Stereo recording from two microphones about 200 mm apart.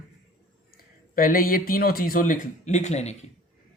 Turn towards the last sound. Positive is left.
turn(degrees=35)  # may be behind; listen again after turning